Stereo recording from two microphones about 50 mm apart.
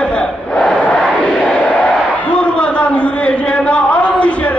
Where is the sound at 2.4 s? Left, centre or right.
Left.